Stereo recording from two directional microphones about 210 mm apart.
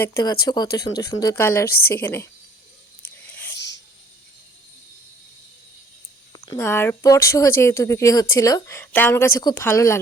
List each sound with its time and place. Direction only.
0.0 s speech: 15° left (ahead or behind)
3.2 s whispering: 10° left (ahead or behind)
6.3 s speech: 20° left (ahead or behind)